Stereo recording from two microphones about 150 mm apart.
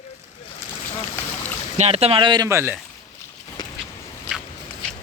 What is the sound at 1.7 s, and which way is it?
Speech, 45° right (ahead or behind).